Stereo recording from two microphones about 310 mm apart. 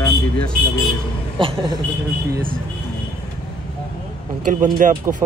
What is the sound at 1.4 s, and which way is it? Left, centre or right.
Speech, centre.